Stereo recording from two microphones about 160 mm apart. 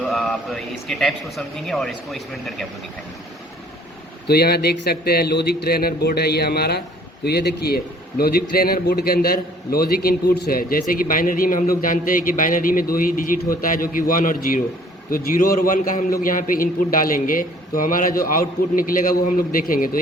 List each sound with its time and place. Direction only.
0.1 s a man's voice: centre (ahead or behind)
4.3 s a man's voice: 85° left; by 20.0 s 60° left (ahead or behind)